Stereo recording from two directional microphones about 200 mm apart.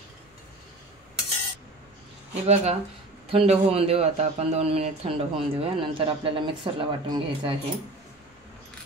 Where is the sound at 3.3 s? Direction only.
30° right (ahead or behind).